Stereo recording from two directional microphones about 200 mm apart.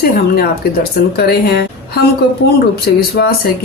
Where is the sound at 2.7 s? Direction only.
50° left (ahead or behind).